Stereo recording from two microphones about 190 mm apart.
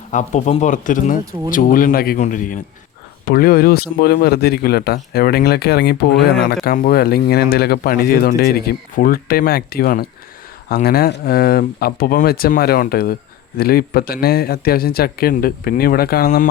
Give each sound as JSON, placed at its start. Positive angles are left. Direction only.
{"t": 0.1, "sound": "speech", "side_deg": 40}